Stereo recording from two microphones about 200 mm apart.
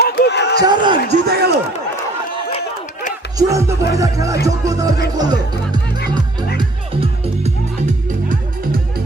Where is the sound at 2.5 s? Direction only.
35° left (ahead or behind).